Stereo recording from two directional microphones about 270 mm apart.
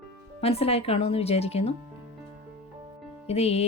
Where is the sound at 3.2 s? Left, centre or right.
Left.